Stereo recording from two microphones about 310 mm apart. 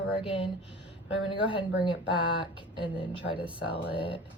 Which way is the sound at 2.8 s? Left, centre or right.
Centre.